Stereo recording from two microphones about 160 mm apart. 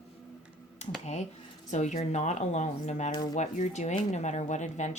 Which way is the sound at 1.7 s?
45° left (ahead or behind).